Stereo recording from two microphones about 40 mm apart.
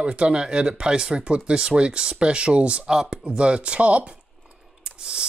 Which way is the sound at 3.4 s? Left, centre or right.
Right.